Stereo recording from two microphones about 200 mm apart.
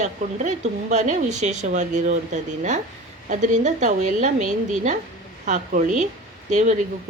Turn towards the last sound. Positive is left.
turn(degrees=-35)  # may be behind; listen again after turning